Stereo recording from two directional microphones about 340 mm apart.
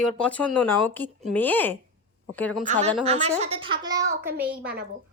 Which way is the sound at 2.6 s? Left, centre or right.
Right.